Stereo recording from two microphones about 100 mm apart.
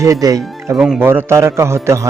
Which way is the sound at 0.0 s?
35° right (ahead or behind).